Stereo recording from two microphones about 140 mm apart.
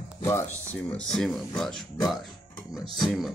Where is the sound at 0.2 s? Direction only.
20° left (ahead or behind).